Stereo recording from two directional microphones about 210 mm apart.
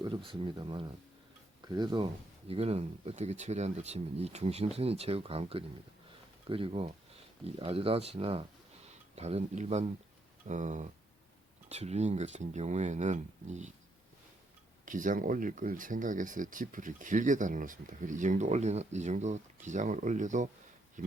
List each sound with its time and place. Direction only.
0.0 s speech: 25° right (ahead or behind)
14.8 s speech: 40° right (ahead or behind)